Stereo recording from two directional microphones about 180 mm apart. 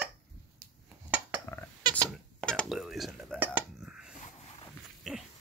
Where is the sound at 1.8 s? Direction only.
25° right (ahead or behind).